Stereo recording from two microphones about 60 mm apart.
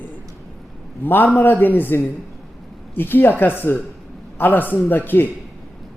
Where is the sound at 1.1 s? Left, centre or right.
Left.